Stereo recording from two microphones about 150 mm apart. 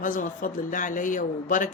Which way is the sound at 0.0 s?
60° left (ahead or behind).